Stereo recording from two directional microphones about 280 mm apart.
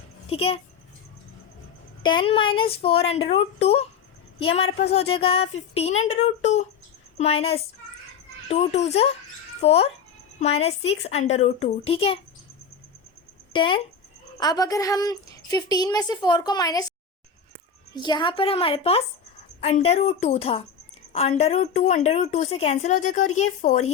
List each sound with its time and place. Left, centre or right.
0.3 s a woman's voice: left
2.0 s a woman's voice: centre
13.5 s a woman's voice: centre
17.9 s a woman's voice: centre